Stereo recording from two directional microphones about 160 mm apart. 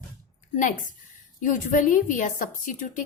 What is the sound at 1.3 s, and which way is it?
A woman's voice, 55° left (ahead or behind).